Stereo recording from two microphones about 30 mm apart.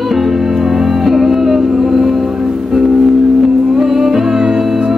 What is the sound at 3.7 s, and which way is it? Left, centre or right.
Music, centre.